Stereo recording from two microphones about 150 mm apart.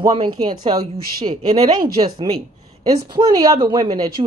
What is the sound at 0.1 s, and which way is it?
Speech, 30° right (ahead or behind).